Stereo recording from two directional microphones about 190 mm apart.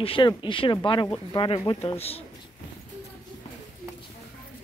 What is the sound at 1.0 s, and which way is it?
Speech, 15° left (ahead or behind).